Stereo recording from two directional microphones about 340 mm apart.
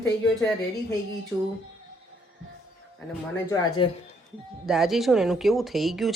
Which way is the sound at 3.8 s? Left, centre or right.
Centre.